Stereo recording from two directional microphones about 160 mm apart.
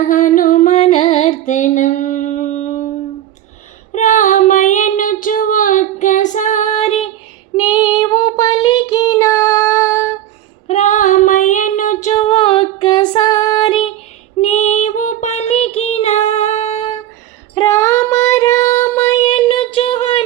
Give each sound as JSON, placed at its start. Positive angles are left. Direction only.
{"t": 0.0, "sound": "music", "side_deg": 50}
{"t": 1.5, "sound": "music", "side_deg": 50}
{"t": 3.9, "sound": "female singing", "side_deg": 45}
{"t": 7.5, "sound": "child singing", "side_deg": 25}
{"t": 10.7, "sound": "female singing", "side_deg": 45}
{"t": 12.2, "sound": "female singing", "side_deg": 30}
{"t": 14.4, "sound": "female singing", "side_deg": 45}
{"t": 17.5, "sound": "child singing", "side_deg": 20}
{"t": 19.3, "sound": "a sound", "side_deg": 35}